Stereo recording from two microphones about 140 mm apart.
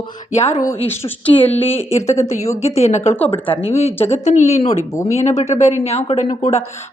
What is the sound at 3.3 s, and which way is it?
A woman's voice, 40° left (ahead or behind).